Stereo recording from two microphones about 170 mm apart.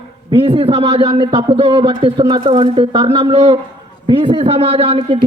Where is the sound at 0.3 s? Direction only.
30° right (ahead or behind).